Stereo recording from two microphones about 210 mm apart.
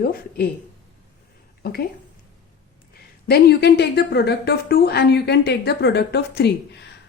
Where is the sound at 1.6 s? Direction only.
45° left (ahead or behind).